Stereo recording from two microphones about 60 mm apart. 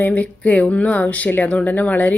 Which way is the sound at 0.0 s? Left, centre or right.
Left.